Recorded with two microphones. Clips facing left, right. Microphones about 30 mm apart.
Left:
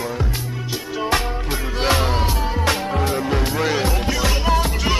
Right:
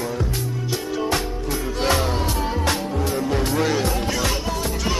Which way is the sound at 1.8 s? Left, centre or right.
Left.